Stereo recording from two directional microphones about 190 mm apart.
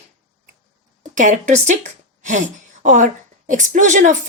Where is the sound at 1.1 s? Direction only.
40° right (ahead or behind).